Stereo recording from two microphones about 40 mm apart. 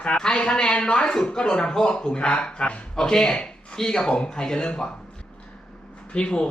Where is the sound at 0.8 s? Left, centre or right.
Left.